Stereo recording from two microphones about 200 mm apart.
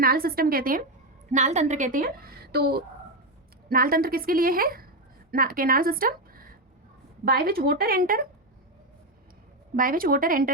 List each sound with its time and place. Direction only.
0.0 s a woman's voice: 50° right (ahead or behind)
1.3 s a woman's voice: 35° right (ahead or behind)
9.7 s a woman's voice: 45° right (ahead or behind)